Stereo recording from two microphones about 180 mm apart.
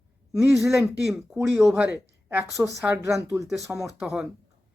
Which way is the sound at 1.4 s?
15° right (ahead or behind).